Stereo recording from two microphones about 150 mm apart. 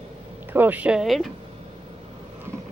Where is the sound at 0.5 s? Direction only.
10° right (ahead or behind).